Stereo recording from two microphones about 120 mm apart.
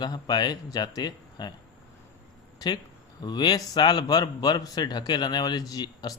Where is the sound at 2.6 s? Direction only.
30° left (ahead or behind).